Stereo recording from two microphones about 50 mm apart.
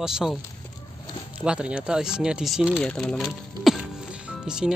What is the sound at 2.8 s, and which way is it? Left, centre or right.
Speech, centre.